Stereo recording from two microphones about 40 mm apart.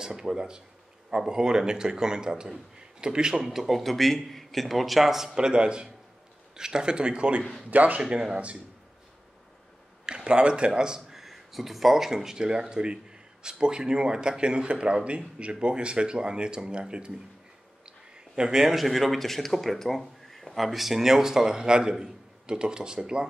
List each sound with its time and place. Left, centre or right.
0.0 s a man's voice: centre
3.4 s speech: centre
5.3 s speech: right
7.7 s speech: right
8.0 s a man's voice: centre
10.0 s speech: right
11.1 s speech: centre; by 17.1 s right
17.8 s a sound: right
18.8 s speech: centre